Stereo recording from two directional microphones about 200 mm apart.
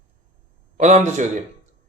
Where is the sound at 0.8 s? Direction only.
35° right (ahead or behind).